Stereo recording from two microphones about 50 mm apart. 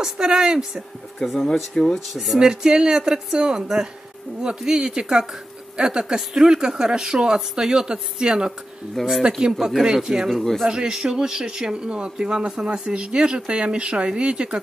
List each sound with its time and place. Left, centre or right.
0.0 s speech: centre
1.2 s speech: centre
2.3 s speech: centre
9.0 s speech: centre
9.4 s speech: centre
10.3 s speech: centre
10.7 s speech: centre